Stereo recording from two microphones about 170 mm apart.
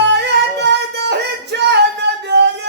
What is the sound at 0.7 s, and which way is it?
Music, 85° right.